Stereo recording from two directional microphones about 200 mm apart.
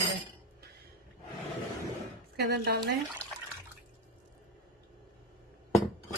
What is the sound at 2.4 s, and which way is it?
Speech, 55° right (ahead or behind).